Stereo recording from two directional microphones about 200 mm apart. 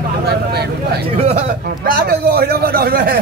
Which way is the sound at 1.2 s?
35° right (ahead or behind).